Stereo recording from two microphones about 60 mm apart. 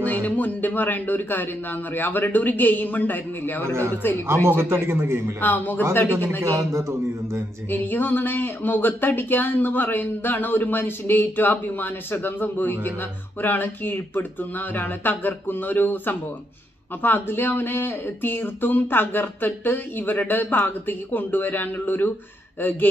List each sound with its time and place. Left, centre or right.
0.0 s speech: left
4.5 s a man's voice: right
5.4 s speech: left
6.4 s speech: right
7.7 s speech: left